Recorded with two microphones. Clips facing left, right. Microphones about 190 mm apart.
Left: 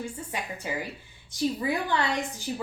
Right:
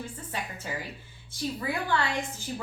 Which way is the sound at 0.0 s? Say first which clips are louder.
Left 2 dB; 15° left (ahead or behind).